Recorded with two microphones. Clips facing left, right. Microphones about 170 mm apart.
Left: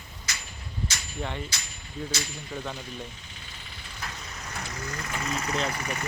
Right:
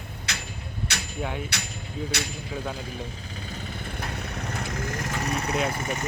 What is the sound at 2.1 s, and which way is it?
Speech, 65° right (ahead or behind).